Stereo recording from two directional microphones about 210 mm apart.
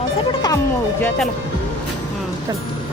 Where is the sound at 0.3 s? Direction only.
20° left (ahead or behind).